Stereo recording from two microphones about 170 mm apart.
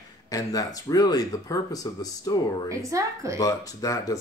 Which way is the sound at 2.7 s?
20° right (ahead or behind).